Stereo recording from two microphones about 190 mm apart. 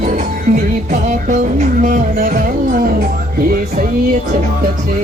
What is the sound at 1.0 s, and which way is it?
Music, 40° right (ahead or behind).